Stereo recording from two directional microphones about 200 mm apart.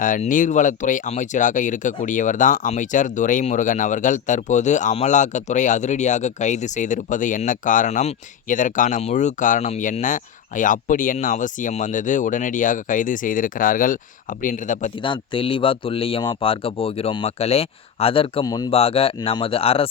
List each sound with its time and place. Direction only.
0.0 s speech: 40° left (ahead or behind)
15.0 s speech: 25° left (ahead or behind)